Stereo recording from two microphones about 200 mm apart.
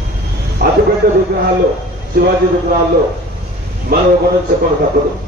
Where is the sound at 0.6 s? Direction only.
55° right (ahead or behind).